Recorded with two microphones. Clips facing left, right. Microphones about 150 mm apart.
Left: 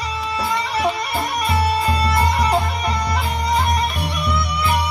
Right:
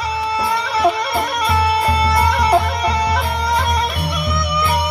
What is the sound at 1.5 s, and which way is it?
Music, 70° right (ahead or behind).